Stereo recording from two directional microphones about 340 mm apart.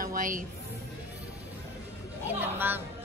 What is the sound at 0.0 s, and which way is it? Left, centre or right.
Music, right.